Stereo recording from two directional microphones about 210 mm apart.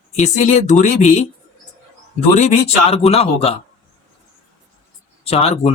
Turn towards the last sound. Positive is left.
turn(degrees=30)  # may be behind; listen again after turning